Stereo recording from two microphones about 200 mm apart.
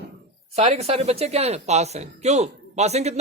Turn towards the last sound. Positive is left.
turn(degrees=-35)  # may be behind; listen again after turning